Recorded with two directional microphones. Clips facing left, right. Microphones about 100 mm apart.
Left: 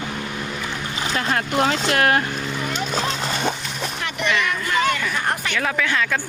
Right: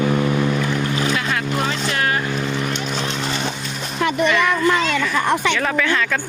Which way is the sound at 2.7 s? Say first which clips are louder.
Even; 40° left (ahead or behind).